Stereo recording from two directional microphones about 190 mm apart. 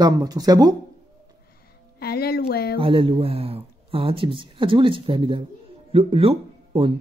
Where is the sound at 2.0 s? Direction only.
55° left (ahead or behind).